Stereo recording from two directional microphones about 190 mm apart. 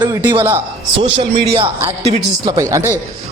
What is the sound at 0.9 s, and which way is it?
A man's voice, 30° right (ahead or behind).